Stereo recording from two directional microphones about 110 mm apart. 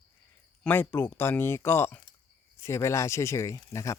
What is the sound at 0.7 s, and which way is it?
Speech, 20° left (ahead or behind).